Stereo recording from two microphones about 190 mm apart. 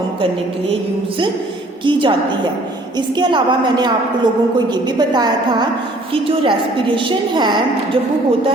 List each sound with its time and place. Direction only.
1.8 s a woman's voice: 25° right (ahead or behind)